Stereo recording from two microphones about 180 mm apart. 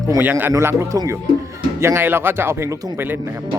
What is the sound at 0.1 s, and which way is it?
Speech, 10° right (ahead or behind).